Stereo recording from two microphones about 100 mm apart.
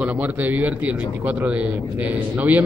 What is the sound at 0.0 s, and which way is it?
Speech, 15° right (ahead or behind).